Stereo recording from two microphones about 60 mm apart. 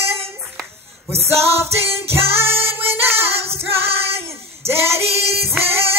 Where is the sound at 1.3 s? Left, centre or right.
Right.